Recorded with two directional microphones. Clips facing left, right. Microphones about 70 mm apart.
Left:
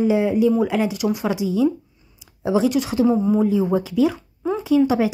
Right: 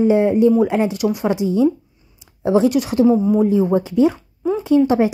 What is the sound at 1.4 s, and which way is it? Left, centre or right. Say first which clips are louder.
Speech: right 3 dB; right.